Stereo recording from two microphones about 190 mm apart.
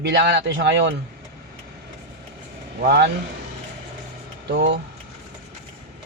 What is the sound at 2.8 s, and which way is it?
Speech, 60° right (ahead or behind).